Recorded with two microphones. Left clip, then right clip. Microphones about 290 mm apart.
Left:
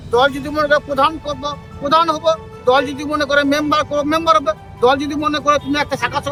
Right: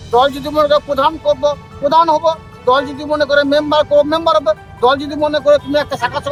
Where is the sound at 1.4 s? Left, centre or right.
Right.